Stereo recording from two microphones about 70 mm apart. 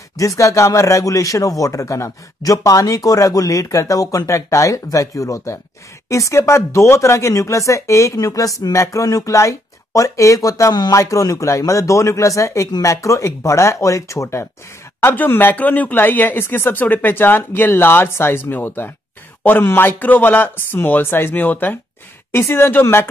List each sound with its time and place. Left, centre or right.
0.4 s a man's voice: left